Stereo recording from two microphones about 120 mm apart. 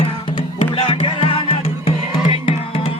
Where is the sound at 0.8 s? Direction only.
50° left (ahead or behind).